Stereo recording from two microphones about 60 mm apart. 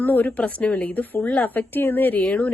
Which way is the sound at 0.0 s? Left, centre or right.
Left.